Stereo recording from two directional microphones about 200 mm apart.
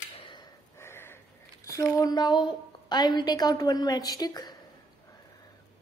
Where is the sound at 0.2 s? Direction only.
25° left (ahead or behind).